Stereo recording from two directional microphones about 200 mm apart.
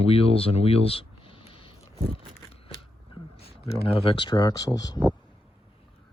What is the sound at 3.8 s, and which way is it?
Speech, 30° left (ahead or behind).